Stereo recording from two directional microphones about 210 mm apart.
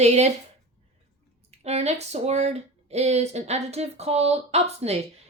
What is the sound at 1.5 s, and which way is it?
Speech, 30° right (ahead or behind).